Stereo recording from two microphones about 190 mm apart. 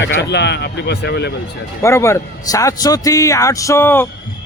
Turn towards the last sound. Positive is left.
turn(degrees=10)  # may be behind; listen again after turning